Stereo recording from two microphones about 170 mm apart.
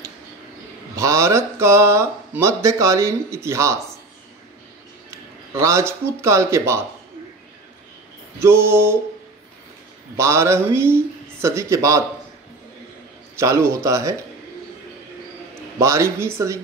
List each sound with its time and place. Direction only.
0.9 s speech: 15° right (ahead or behind)
5.5 s speech: 15° right (ahead or behind)
8.4 s speech: 15° right (ahead or behind)
10.1 s speech: 15° right (ahead or behind)
13.4 s speech: 15° right (ahead or behind)
15.8 s speech: 15° right (ahead or behind)